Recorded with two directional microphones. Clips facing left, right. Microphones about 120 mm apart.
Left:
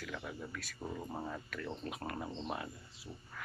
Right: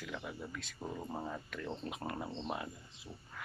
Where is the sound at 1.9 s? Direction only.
20° right (ahead or behind).